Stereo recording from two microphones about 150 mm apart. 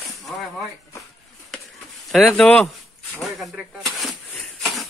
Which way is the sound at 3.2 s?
Centre (ahead or behind).